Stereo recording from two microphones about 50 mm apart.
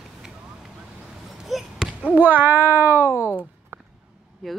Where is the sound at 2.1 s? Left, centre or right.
Right.